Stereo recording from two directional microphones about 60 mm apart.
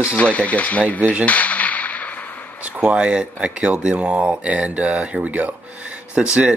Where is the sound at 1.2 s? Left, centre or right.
Left.